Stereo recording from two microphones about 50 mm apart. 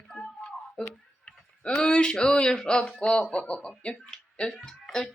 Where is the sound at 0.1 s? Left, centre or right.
Centre.